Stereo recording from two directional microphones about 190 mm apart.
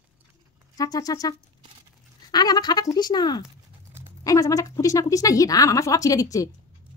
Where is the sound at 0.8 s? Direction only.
20° left (ahead or behind).